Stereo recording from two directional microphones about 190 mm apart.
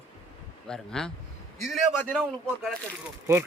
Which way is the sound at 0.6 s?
5° left (ahead or behind).